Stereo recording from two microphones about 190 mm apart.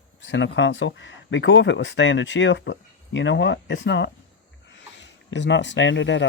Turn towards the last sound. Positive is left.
turn(degrees=70)  # may be behind; listen again after turning